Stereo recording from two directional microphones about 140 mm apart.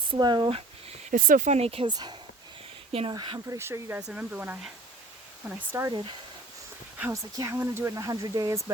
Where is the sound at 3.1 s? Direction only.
30° right (ahead or behind).